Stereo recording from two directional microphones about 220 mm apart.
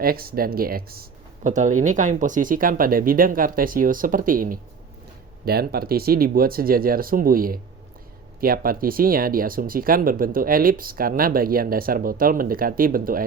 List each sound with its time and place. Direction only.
0.0 s speech: 45° right (ahead or behind)